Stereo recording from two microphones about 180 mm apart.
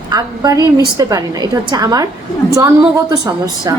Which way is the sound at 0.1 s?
20° right (ahead or behind).